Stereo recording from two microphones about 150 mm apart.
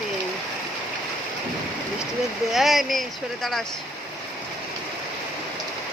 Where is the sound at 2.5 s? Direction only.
Centre (ahead or behind).